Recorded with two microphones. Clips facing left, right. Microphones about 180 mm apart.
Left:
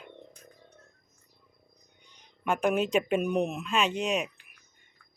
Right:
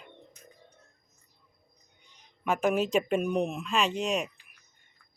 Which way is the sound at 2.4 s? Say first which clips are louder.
Even; centre (ahead or behind).